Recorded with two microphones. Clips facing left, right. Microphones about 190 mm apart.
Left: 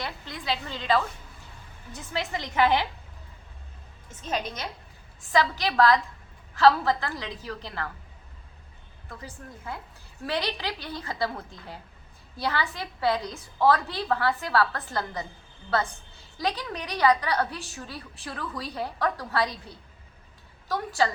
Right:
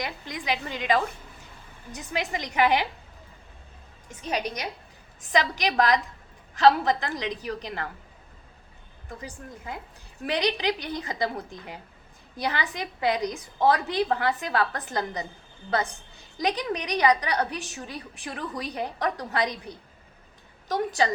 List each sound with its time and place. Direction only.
0.0 s a woman's voice: 15° right (ahead or behind)
4.2 s a woman's voice: 15° right (ahead or behind)
9.0 s a woman's voice: 15° right (ahead or behind)